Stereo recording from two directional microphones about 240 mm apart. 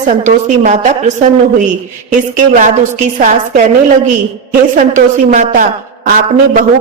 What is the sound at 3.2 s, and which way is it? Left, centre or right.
Speech, right.